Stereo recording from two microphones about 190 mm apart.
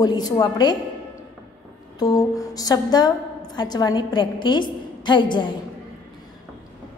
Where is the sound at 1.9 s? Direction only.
20° left (ahead or behind).